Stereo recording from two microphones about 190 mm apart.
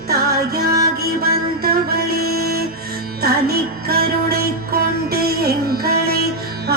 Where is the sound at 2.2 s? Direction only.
55° right (ahead or behind).